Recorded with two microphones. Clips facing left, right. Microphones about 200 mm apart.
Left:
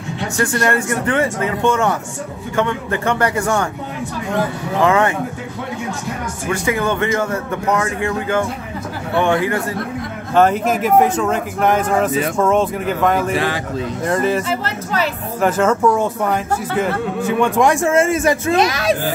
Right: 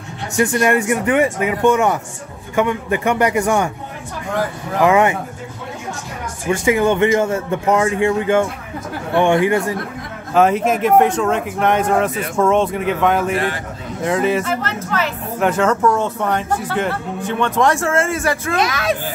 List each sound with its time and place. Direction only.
0.4 s speech: 15° right (ahead or behind)
4.8 s speech: 20° right (ahead or behind)
6.5 s a man's voice: 25° right (ahead or behind)
10.3 s speech: centre (ahead or behind)
13.3 s speech: 90° left
14.0 s speech: centre (ahead or behind)
14.5 s speech: 35° left (ahead or behind)
15.4 s speech: 5° left (ahead or behind); by 18.9 s 25° left (ahead or behind)